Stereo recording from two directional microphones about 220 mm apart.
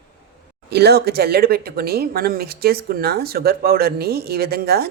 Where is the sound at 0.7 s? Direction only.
45° right (ahead or behind).